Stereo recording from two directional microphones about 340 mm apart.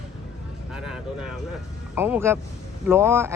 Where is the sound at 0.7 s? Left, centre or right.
Centre.